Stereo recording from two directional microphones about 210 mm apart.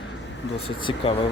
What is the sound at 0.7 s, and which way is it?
Speech, 25° left (ahead or behind).